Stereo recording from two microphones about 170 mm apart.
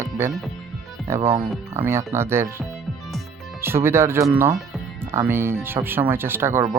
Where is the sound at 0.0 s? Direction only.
15° right (ahead or behind).